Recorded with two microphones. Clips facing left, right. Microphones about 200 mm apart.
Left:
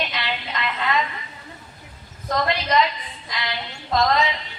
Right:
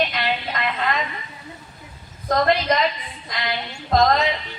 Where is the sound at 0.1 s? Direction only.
50° right (ahead or behind).